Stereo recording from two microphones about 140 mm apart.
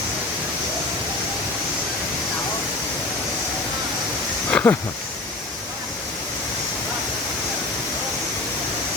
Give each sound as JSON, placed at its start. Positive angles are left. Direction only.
{"t": 4.5, "sound": "wild animals", "side_deg": 15}